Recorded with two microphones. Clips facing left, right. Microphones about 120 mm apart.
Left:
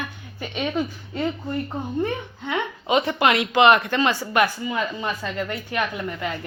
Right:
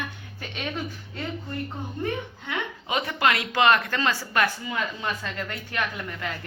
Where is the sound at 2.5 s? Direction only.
25° left (ahead or behind).